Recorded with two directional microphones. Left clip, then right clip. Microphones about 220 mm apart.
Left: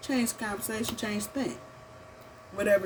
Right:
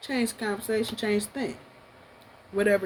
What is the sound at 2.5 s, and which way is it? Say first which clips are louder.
Speech: right 1 dB; 30° right (ahead or behind).